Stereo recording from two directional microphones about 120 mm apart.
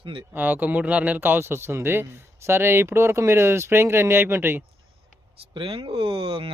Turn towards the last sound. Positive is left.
turn(degrees=-50)  # may be behind; listen again after turning